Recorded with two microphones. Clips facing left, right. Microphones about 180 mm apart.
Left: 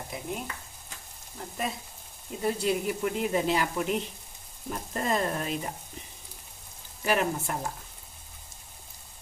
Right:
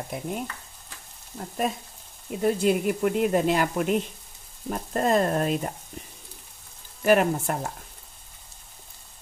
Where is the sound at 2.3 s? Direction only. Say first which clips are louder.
Right 5 dB; 60° right (ahead or behind).